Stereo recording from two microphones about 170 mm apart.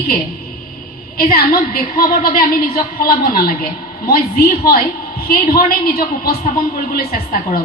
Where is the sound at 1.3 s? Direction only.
60° left (ahead or behind).